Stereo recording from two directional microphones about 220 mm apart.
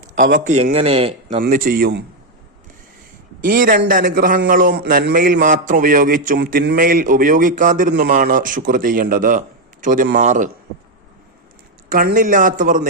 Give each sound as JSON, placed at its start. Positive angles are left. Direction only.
{"t": 0.2, "sound": "a man's voice", "side_deg": -40}
{"t": 3.4, "sound": "a man's voice", "side_deg": -40}
{"t": 11.9, "sound": "a man's voice", "side_deg": -40}